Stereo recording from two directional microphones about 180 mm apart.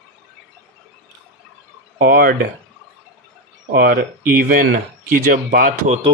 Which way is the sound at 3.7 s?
55° right (ahead or behind).